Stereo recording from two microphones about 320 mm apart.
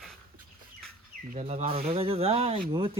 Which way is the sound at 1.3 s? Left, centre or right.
Centre.